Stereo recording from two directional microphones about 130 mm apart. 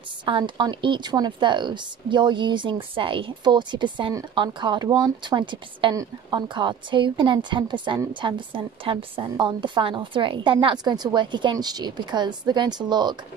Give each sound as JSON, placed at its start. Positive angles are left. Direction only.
{"t": 0.2, "sound": "a woman's voice", "side_deg": -35}